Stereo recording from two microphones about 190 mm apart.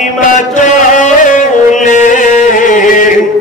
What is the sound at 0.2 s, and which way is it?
Chant, 40° left (ahead or behind).